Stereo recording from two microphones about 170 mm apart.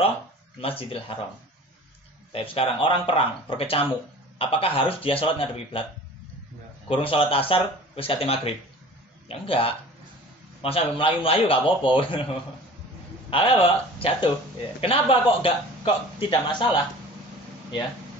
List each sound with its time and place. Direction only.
0.6 s a man's voice: 35° left (ahead or behind)
2.3 s a man's voice: 35° left (ahead or behind)
6.9 s a man's voice: 35° left (ahead or behind)
13.3 s a man's voice: 30° left (ahead or behind)